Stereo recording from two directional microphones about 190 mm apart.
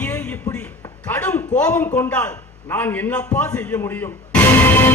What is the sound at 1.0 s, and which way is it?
A man's voice, 10° left (ahead or behind).